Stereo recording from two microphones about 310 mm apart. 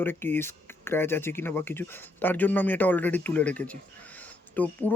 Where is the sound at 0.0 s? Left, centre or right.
Centre.